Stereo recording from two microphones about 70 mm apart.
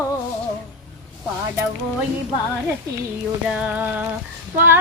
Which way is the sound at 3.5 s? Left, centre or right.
Centre.